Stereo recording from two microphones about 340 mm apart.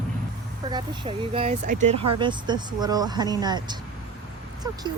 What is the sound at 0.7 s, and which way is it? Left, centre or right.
Speech, centre.